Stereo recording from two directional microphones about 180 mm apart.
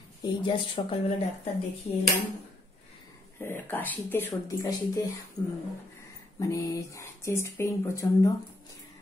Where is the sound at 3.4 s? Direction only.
10° left (ahead or behind).